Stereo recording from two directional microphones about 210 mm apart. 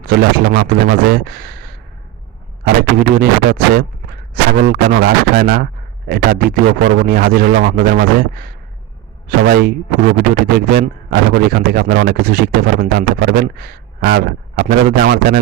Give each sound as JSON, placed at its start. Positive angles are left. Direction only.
{"t": 0.0, "sound": "speech", "side_deg": -45}
{"t": 3.2, "sound": "speech", "side_deg": -45}